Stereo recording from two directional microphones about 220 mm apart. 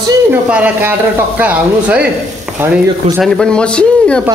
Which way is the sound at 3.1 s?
5° left (ahead or behind).